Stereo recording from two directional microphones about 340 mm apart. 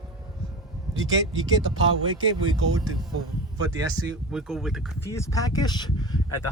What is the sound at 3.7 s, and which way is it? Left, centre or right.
Speech, centre.